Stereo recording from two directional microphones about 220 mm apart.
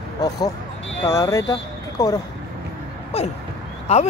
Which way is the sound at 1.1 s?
15° left (ahead or behind).